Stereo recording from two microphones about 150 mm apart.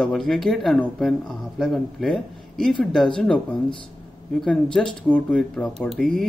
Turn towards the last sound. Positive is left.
turn(degrees=0)  # may be behind; listen again after turning